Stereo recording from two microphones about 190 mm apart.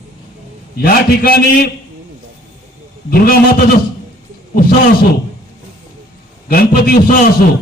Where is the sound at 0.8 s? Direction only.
50° left (ahead or behind).